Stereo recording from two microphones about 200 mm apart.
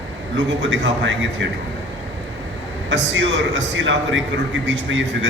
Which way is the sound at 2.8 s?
65° right (ahead or behind).